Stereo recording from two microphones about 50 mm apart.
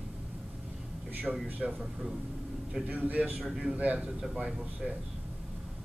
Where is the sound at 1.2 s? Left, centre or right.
Right.